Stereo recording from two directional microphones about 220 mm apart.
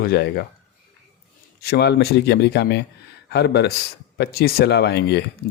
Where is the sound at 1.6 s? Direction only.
45° left (ahead or behind).